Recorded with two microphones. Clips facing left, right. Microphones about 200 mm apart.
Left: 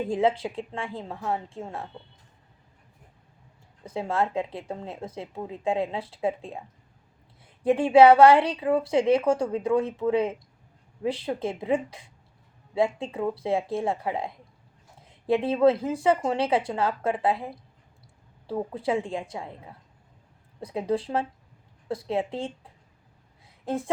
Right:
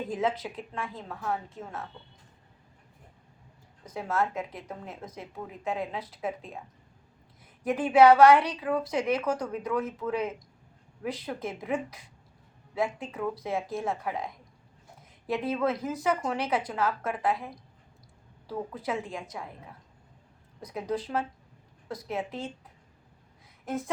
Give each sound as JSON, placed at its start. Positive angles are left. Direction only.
{"t": 0.1, "sound": "a woman's voice", "side_deg": 30}
{"t": 3.8, "sound": "a woman's voice", "side_deg": 25}
{"t": 7.6, "sound": "a woman's voice", "side_deg": 30}
{"t": 20.6, "sound": "a woman's voice", "side_deg": 30}